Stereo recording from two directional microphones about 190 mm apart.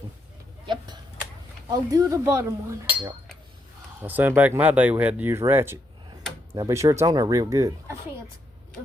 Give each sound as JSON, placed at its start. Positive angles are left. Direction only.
{"t": 1.7, "sound": "speech", "side_deg": -15}